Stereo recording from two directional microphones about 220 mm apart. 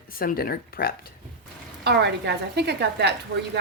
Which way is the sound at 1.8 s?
50° right (ahead or behind).